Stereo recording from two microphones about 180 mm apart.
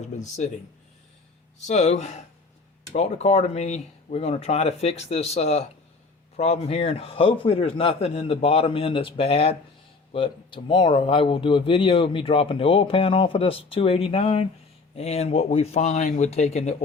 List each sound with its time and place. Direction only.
0.0 s speech: 40° left (ahead or behind)
1.5 s speech: 40° left (ahead or behind)